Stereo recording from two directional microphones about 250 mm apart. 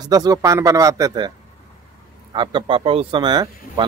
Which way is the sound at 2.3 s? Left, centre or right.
Centre.